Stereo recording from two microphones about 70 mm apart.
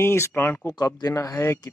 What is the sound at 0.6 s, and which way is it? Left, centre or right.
Speech, left.